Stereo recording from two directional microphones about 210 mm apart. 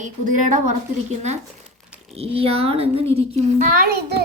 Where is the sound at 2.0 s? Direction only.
30° right (ahead or behind).